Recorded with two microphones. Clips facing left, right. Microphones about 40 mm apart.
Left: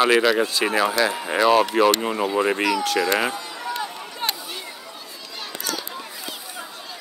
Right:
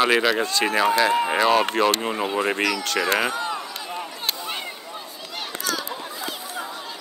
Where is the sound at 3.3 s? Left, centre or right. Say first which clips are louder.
Right 6 dB; right.